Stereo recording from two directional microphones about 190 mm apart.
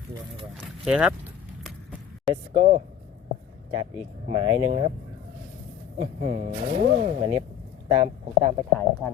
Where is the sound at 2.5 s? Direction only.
40° right (ahead or behind).